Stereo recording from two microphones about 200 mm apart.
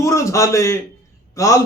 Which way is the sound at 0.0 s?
15° left (ahead or behind).